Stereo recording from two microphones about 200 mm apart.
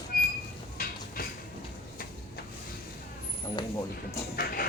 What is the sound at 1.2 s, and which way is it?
Music, 45° left (ahead or behind).